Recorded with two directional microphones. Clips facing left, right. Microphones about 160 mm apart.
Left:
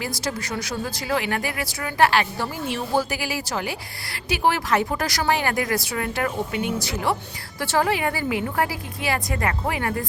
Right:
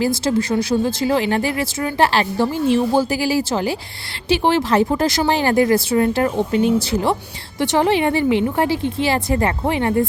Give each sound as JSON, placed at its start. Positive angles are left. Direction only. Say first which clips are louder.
{"t": 0.0, "sound": "speech", "louder": "right 10 dB", "side_deg": -30}